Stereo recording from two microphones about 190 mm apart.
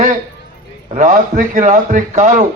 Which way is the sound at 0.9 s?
45° right (ahead or behind).